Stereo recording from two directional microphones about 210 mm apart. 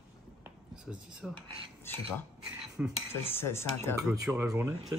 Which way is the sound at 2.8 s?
5° right (ahead or behind).